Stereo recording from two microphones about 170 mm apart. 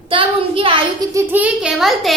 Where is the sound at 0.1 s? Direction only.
30° right (ahead or behind).